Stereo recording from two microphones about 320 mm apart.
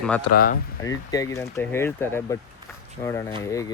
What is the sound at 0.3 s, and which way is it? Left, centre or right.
Speech, left.